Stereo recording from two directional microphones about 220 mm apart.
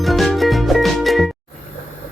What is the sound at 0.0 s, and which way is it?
Music, centre (ahead or behind).